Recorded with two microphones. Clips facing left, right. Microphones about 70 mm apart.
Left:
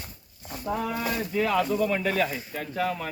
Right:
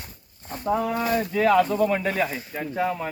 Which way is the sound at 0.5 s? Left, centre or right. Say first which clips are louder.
Right 5 dB; right.